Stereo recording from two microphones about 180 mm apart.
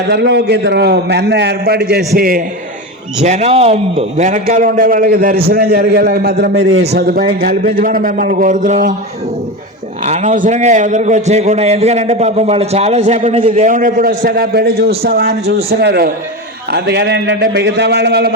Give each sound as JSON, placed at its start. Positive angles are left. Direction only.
{"t": 0.1, "sound": "a man's voice", "side_deg": -70}
{"t": 2.1, "sound": "a man's voice", "side_deg": -55}
{"t": 3.2, "sound": "a man's voice", "side_deg": -40}
{"t": 6.9, "sound": "a man's voice", "side_deg": -55}
{"t": 10.0, "sound": "a man's voice", "side_deg": -40}